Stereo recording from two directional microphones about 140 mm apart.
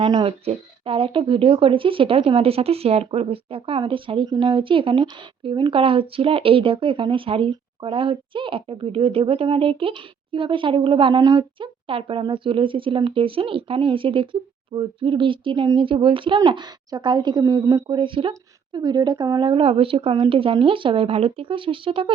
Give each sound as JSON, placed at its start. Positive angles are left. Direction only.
{"t": 0.0, "sound": "speech", "side_deg": -40}